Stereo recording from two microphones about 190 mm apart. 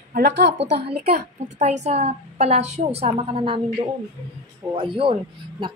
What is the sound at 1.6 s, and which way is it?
A woman's voice, 35° right (ahead or behind).